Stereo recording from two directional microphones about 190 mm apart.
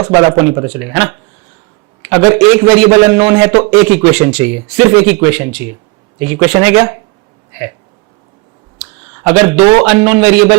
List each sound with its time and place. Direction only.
0.0 s a man's voice: 20° right (ahead or behind)
9.2 s a man's voice: 10° right (ahead or behind)
9.6 s a man's voice: 25° right (ahead or behind)
9.8 s a man's voice: 10° right (ahead or behind)